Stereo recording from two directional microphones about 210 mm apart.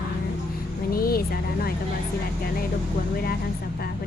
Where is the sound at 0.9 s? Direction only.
45° left (ahead or behind).